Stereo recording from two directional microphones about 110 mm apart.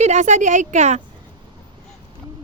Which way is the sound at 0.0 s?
90° right.